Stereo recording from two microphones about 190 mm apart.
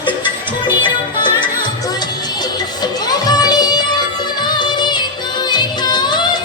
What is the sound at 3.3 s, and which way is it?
Music, 20° left (ahead or behind).